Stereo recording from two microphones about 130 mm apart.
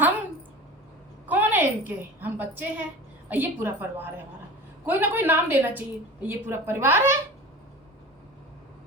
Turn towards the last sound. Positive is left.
turn(degrees=-20)  # may be behind; listen again after turning